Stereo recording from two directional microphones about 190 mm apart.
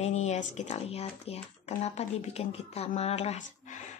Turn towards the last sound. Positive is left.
turn(degrees=35)  # may be behind; listen again after turning